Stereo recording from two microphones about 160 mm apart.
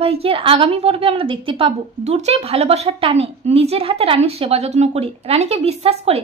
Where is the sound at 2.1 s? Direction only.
45° right (ahead or behind).